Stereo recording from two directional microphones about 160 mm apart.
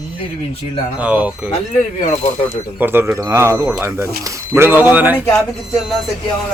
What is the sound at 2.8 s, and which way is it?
Speech, 15° right (ahead or behind).